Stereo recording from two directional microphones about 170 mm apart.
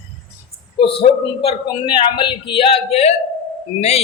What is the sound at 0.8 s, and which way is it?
A man's voice, 35° left (ahead or behind).